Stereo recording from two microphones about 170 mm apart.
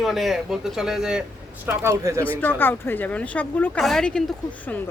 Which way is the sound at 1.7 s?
15° right (ahead or behind).